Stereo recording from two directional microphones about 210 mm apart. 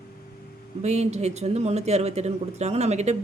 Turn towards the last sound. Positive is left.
turn(degrees=-30)  # may be behind; listen again after turning